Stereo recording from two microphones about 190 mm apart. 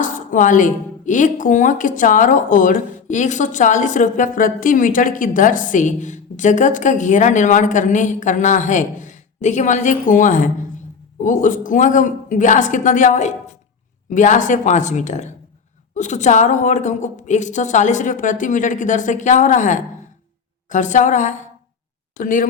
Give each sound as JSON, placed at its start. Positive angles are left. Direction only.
{"t": 0.0, "sound": "speech", "side_deg": 45}